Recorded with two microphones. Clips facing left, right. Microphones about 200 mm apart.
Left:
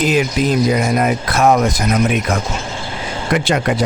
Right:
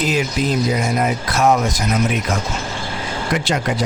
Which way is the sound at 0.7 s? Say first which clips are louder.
Left 3 dB; 60° left (ahead or behind).